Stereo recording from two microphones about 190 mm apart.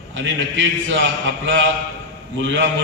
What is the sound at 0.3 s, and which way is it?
Speech, 70° right (ahead or behind).